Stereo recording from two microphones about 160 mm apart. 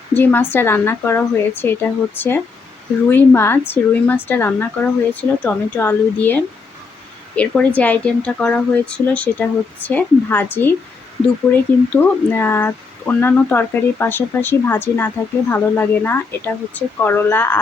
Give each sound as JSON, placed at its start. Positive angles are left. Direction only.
{"t": 0.1, "sound": "speech", "side_deg": 10}